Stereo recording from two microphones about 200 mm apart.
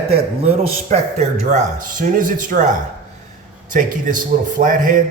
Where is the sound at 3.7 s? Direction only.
40° right (ahead or behind).